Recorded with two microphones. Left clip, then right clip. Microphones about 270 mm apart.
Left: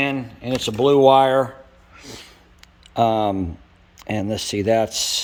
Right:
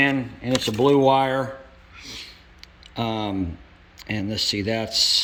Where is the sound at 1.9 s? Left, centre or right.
Left.